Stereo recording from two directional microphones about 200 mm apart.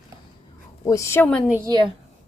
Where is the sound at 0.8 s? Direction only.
15° left (ahead or behind).